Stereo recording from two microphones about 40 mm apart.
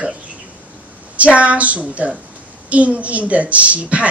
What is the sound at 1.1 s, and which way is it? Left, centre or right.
A woman's voice, right.